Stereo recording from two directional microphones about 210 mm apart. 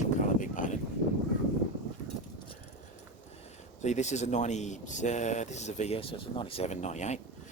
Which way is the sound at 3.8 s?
35° left (ahead or behind).